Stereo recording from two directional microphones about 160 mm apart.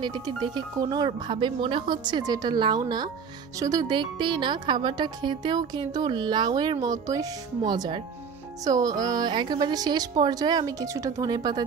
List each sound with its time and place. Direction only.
0.0 s speech: 25° right (ahead or behind)